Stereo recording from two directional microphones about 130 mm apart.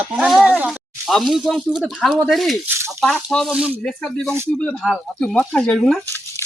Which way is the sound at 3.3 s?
5° left (ahead or behind).